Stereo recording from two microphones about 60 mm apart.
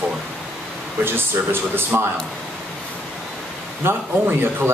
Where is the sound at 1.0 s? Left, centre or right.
Right.